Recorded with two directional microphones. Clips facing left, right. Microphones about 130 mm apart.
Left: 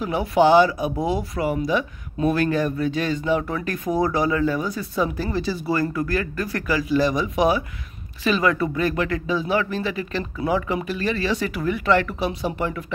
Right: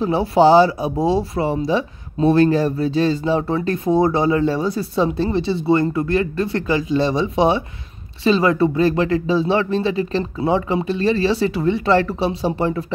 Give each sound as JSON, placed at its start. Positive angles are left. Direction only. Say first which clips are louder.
{"t": 0.0, "sound": "speech", "louder": "right 4 dB", "side_deg": -30}